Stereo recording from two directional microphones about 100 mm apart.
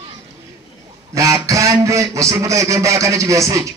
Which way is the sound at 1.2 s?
30° right (ahead or behind).